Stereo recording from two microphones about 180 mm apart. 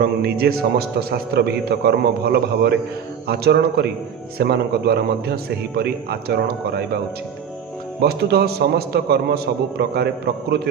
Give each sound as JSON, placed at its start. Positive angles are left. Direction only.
{"t": 0.0, "sound": "a man's voice", "side_deg": -60}
{"t": 8.0, "sound": "a man's voice", "side_deg": -60}